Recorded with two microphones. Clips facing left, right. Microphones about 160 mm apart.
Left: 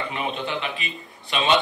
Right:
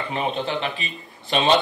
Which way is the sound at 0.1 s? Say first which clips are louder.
Right 3 dB; 35° right (ahead or behind).